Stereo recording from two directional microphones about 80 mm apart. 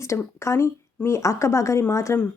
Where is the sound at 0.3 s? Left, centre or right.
Left.